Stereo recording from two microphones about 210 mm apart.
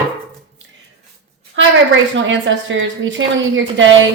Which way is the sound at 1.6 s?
60° right (ahead or behind).